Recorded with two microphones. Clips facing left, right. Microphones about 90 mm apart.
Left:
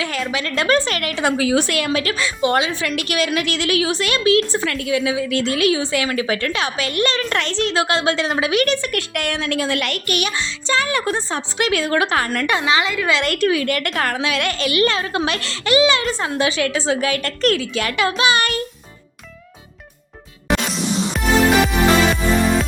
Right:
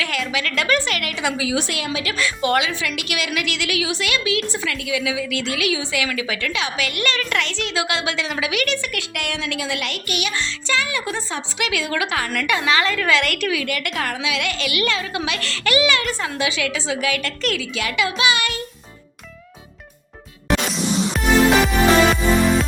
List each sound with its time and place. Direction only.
0.0 s a woman's voice: 35° left (ahead or behind)
2.1 s a woman's voice: 25° left (ahead or behind)
13.1 s a woman's voice: 30° left (ahead or behind)
15.4 s a woman's voice: 25° left (ahead or behind); by 18.6 s 45° left (ahead or behind)